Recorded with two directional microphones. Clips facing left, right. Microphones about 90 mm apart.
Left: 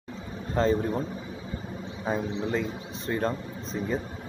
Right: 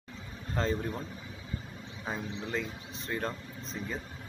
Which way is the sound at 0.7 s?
30° left (ahead or behind).